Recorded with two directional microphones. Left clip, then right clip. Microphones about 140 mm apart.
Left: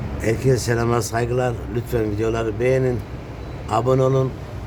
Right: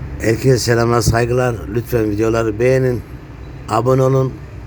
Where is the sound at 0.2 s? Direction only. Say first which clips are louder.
Right 5 dB; 25° right (ahead or behind).